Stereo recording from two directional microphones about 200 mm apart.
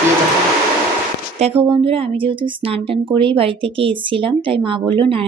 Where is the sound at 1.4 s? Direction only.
30° right (ahead or behind).